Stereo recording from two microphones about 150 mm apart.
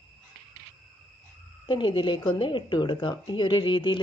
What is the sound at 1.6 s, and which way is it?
A woman's voice, 35° left (ahead or behind).